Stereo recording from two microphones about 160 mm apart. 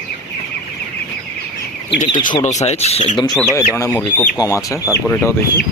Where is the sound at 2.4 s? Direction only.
45° left (ahead or behind).